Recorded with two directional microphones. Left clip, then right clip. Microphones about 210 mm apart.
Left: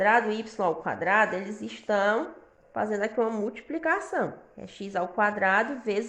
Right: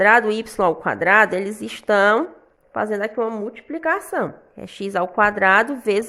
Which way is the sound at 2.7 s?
45° right (ahead or behind).